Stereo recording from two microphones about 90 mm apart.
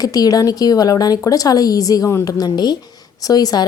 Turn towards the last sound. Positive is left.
turn(degrees=50)  # may be behind; listen again after turning